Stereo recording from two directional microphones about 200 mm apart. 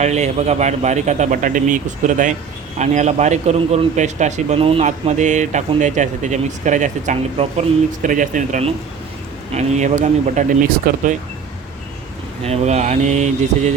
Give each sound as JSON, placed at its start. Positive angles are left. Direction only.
{"t": 0.0, "sound": "a man's voice", "side_deg": -35}
{"t": 12.4, "sound": "a man's voice", "side_deg": -35}